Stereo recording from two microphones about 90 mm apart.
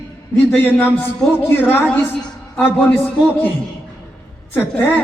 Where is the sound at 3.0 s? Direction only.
20° left (ahead or behind).